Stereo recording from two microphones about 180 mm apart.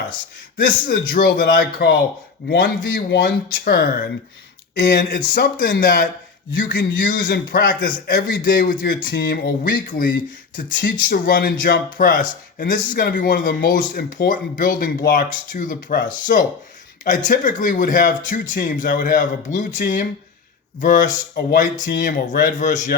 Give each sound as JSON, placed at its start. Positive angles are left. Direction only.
{"t": 0.5, "sound": "speech", "side_deg": 60}
{"t": 2.5, "sound": "speech", "side_deg": 70}
{"t": 4.8, "sound": "speech", "side_deg": 65}